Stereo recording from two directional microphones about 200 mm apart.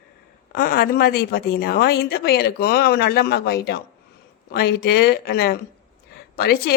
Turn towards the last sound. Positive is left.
turn(degrees=50)  # may be behind; listen again after turning